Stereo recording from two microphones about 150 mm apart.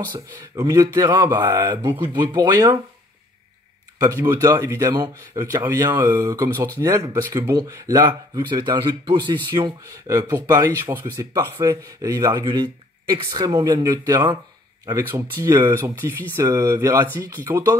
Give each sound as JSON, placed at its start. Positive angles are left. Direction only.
{"t": 0.1, "sound": "speech", "side_deg": -25}
{"t": 4.0, "sound": "speech", "side_deg": -25}